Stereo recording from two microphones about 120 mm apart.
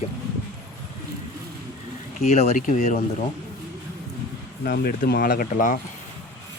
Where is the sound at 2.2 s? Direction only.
65° left (ahead or behind); by 3.0 s 90° left.